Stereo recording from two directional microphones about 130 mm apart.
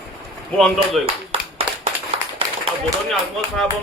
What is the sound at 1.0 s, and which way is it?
Clapping, 50° right (ahead or behind).